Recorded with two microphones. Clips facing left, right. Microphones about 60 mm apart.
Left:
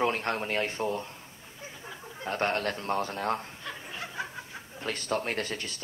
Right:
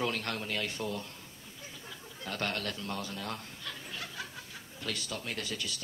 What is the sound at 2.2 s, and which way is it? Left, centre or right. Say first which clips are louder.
Speech: left 7 dB; left.